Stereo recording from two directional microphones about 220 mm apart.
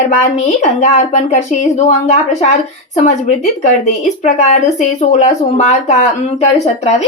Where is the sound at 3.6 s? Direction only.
30° left (ahead or behind).